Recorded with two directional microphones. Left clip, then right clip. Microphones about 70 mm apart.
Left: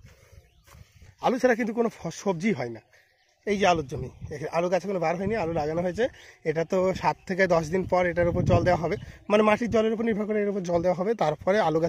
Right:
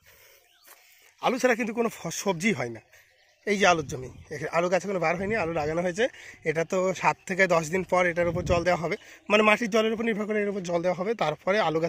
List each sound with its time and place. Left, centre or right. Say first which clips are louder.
1.2 s speech: left 1 dB; left
2.0 s a man's voice: right 1 dB; left
3.4 s speech: right 1 dB; centre
4.0 s speech: even; left
5.0 s a man's voice: even; left
5.7 s speech: even; left
6.1 s a man's voice: even; left
6.8 s speech: even; left
8.6 s a man's voice: left 1 dB; left
9.1 s a man's voice: right 1 dB; left
10.2 s speech: left 1 dB; left
10.5 s speech: left 2 dB; left